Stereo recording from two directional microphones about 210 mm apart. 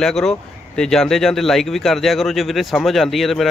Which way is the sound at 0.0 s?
Centre (ahead or behind).